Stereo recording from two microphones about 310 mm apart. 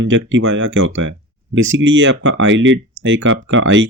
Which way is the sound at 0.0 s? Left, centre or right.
Right.